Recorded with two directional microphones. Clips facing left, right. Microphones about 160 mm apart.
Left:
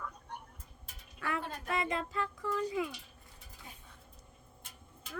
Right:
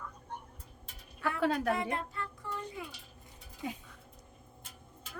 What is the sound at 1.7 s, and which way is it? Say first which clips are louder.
A child's voice: even; 90° left.